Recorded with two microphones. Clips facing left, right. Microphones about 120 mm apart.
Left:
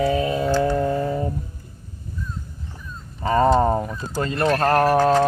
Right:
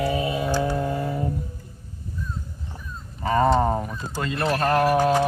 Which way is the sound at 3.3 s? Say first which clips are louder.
Left 2 dB; 35° left (ahead or behind).